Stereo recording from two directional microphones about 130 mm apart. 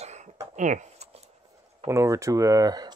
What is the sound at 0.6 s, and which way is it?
Speech, 65° right (ahead or behind).